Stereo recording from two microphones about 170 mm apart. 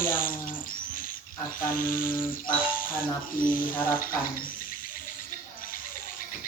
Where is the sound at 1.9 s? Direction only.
55° left (ahead or behind).